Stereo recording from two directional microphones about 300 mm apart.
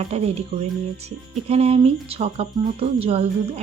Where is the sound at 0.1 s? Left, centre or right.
Right.